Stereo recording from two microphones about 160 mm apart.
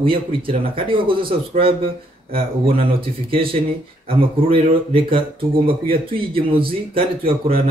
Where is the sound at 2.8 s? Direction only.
35° right (ahead or behind).